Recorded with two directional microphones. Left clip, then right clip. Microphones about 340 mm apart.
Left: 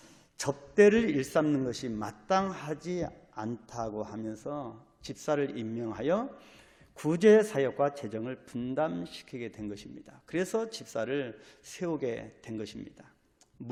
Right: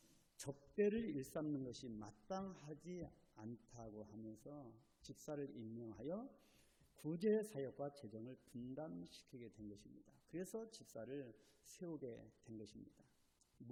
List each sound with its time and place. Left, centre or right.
0.4 s a man's voice: centre
10.1 s a man's voice: centre